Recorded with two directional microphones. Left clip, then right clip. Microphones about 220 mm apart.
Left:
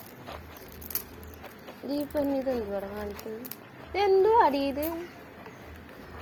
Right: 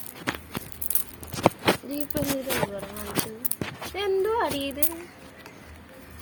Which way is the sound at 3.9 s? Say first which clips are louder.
Left 4 dB; 5° right (ahead or behind).